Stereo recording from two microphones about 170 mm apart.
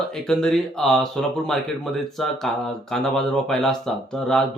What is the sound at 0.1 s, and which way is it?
Speech, centre (ahead or behind).